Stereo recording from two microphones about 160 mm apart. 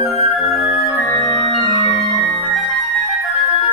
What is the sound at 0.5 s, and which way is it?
Music, centre (ahead or behind).